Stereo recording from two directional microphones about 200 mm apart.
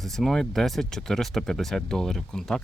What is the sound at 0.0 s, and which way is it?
Speech, centre (ahead or behind).